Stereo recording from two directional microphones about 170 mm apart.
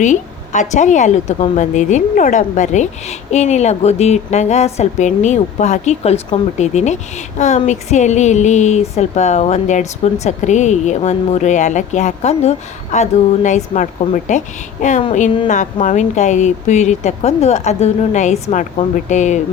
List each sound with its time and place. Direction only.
0.0 s a woman's voice: 45° left (ahead or behind)